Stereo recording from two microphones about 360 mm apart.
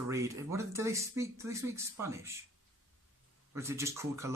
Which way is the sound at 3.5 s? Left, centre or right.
Centre.